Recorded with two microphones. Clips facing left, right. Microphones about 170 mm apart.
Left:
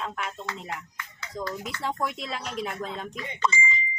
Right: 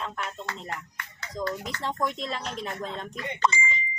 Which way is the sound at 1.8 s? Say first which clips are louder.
Right 1 dB; 10° left (ahead or behind).